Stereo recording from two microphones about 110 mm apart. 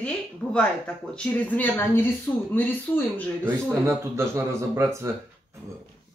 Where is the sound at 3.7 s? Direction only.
25° right (ahead or behind).